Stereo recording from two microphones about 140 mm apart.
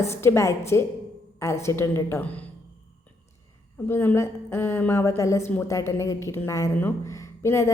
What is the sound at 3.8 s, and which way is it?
A woman's voice, 15° left (ahead or behind).